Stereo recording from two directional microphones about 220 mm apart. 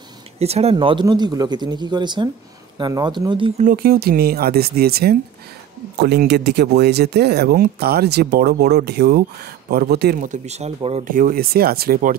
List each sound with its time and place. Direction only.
0.4 s speech: 30° right (ahead or behind)
3.7 s speech: 45° right (ahead or behind); by 11.1 s 30° right (ahead or behind)
11.1 s speech: 40° right (ahead or behind)